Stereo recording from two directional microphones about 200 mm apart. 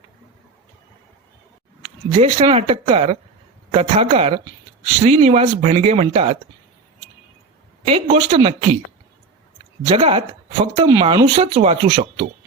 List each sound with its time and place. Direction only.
1.8 s speech: 30° right (ahead or behind)
7.9 s speech: 30° right (ahead or behind)
9.9 s speech: 30° right (ahead or behind)